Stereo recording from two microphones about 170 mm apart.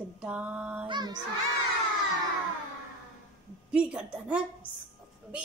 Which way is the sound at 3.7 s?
5° right (ahead or behind).